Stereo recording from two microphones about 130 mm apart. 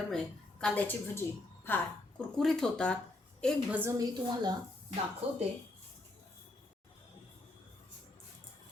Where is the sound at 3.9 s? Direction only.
30° right (ahead or behind).